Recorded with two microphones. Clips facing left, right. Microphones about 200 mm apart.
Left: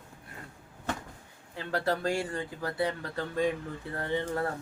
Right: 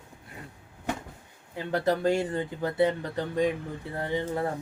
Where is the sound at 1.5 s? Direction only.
20° right (ahead or behind).